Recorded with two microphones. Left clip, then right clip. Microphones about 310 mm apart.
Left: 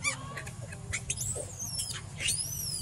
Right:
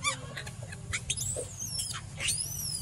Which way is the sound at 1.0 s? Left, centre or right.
Left.